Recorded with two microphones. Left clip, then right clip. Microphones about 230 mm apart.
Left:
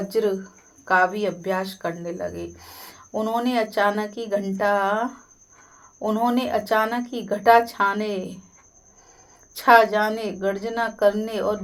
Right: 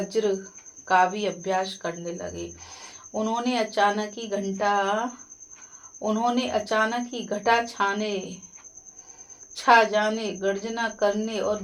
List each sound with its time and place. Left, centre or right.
0.1 s speech: left
9.6 s speech: left